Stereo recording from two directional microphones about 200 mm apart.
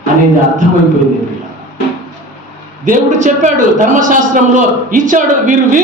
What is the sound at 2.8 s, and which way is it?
A man's voice, 40° right (ahead or behind).